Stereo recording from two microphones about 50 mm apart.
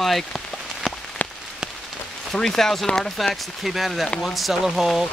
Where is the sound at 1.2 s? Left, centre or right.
Left.